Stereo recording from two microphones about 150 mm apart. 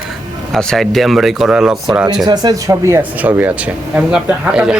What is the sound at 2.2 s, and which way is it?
Speech, 30° right (ahead or behind).